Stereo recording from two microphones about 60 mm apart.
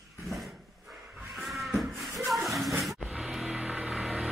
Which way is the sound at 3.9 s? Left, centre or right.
Centre.